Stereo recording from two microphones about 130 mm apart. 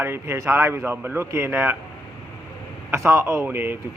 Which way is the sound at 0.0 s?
20° right (ahead or behind).